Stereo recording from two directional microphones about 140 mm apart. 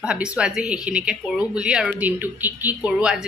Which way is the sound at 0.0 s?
5° right (ahead or behind).